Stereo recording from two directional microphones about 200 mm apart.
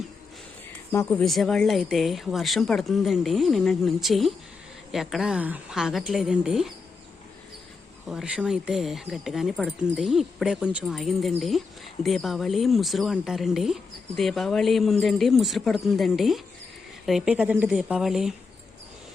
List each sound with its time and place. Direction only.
0.9 s speech: 5° left (ahead or behind)
8.1 s speech: 5° right (ahead or behind)